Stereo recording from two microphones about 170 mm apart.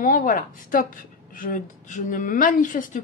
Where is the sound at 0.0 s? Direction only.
50° left (ahead or behind).